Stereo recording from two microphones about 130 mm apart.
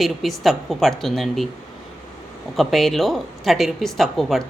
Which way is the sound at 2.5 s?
Centre (ahead or behind).